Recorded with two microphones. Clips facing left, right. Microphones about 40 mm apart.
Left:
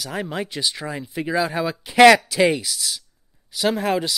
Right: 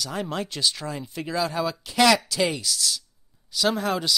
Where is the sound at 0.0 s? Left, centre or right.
Centre.